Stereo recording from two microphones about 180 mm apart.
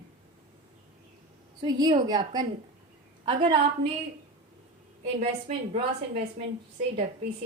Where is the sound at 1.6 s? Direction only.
25° right (ahead or behind).